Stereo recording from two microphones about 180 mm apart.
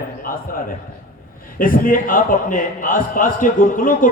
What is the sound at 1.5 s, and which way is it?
A man's voice, 50° left (ahead or behind).